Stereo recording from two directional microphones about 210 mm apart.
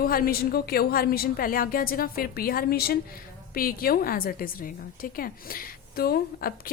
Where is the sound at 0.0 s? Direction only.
45° left (ahead or behind).